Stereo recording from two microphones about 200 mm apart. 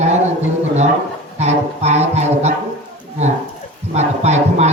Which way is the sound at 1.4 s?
35° right (ahead or behind).